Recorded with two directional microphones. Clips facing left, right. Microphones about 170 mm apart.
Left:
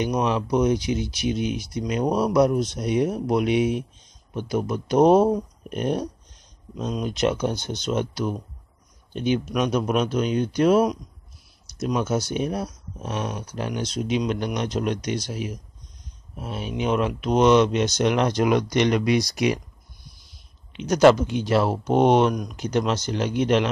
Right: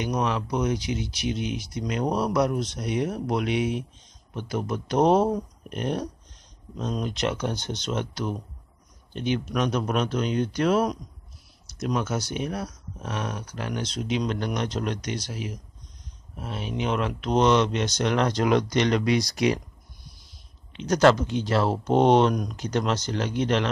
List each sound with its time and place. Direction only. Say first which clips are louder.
0.0 s speech: left 3 dB; 20° left (ahead or behind)
20.7 s speech: left 3 dB; 15° left (ahead or behind)